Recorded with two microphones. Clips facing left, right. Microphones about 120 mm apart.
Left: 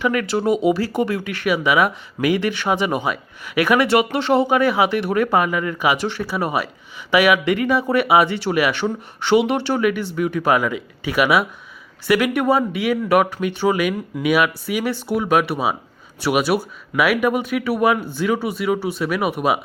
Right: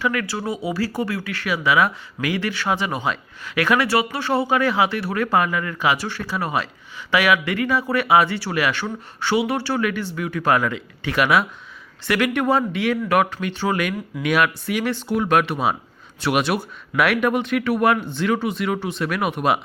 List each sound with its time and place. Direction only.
0.0 s speech: 20° left (ahead or behind)